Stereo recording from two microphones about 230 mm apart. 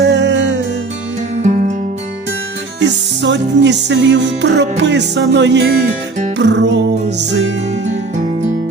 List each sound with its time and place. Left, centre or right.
0.0 s music: right
1.4 s music: right
3.2 s music: right